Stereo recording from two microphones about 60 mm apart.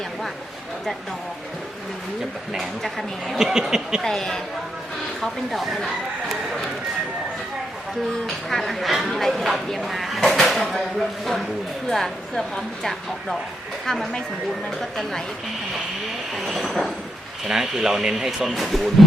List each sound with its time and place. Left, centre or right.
2.5 s speech: centre
4.0 s a woman's voice: centre
8.3 s speech: centre
11.9 s speech: centre
16.3 s speech: centre